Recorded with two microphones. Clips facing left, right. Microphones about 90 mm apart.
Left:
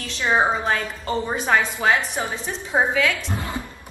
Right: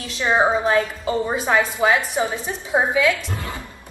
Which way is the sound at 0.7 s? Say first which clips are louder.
Right 4 dB; 5° right (ahead or behind).